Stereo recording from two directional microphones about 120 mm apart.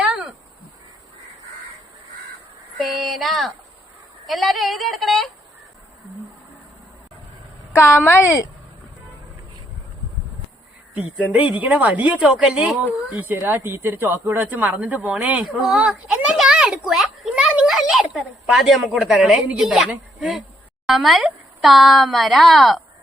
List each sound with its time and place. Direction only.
0.1 s a sound: 5° right (ahead or behind)
2.8 s a woman's voice: centre (ahead or behind)
7.7 s a woman's voice: 20° left (ahead or behind)
10.9 s a woman's voice: 10° right (ahead or behind)